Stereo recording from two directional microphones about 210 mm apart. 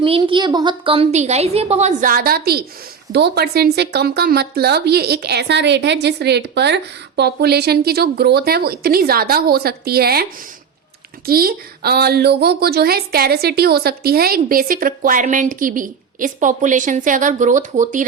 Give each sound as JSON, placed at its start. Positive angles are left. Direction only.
{"t": 0.0, "sound": "a woman's voice", "side_deg": -25}
{"t": 11.3, "sound": "a woman's voice", "side_deg": -45}